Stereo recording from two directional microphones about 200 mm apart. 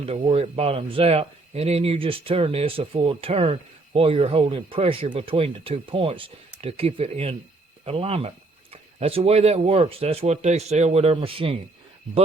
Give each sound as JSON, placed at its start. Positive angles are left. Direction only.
{"t": 0.0, "sound": "speech", "side_deg": -30}